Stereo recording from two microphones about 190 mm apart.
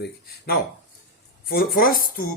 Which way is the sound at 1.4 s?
50° left (ahead or behind).